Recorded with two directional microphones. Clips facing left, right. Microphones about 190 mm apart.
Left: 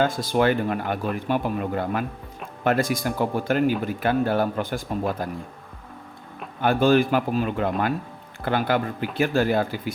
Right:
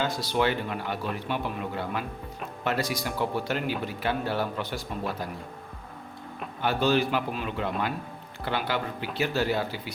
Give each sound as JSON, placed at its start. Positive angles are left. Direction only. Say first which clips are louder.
{"t": 0.0, "sound": "speech", "louder": "left 5 dB", "side_deg": 50}
{"t": 6.6, "sound": "speech", "louder": "left 6 dB", "side_deg": 50}